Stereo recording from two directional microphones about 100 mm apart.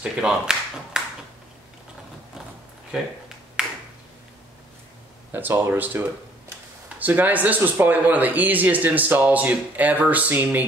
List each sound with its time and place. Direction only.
0.0 s speech: 10° right (ahead or behind)
5.3 s speech: 20° right (ahead or behind)